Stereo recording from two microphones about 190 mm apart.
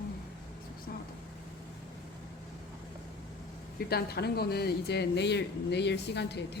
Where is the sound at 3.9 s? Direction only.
55° left (ahead or behind).